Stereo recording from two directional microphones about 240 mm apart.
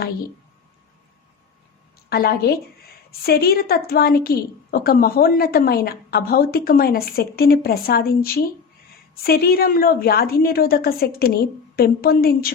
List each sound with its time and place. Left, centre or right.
2.0 s a woman's voice: left